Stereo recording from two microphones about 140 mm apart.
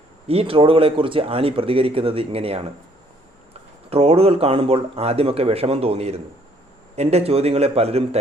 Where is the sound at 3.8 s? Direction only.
45° right (ahead or behind).